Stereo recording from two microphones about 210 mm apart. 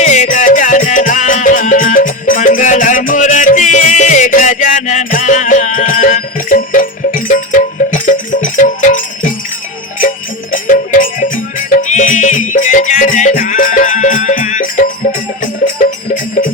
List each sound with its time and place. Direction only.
0.0 s music: 35° left (ahead or behind)
10.5 s music: 40° left (ahead or behind)